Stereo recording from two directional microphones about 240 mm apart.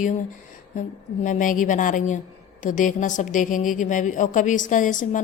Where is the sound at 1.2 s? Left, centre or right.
Left.